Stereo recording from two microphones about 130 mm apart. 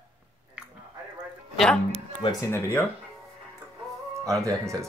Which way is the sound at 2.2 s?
20° left (ahead or behind).